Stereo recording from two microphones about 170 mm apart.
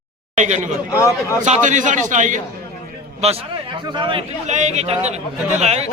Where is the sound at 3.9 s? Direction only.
30° right (ahead or behind).